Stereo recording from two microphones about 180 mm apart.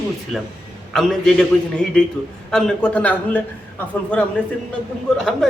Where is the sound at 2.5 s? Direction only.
5° left (ahead or behind).